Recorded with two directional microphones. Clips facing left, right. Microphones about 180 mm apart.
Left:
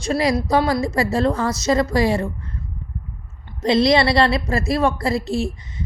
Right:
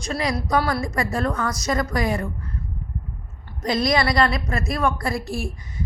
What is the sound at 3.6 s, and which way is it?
A woman's voice, 25° left (ahead or behind).